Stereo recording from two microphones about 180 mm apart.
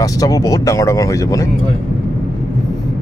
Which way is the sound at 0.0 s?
20° left (ahead or behind).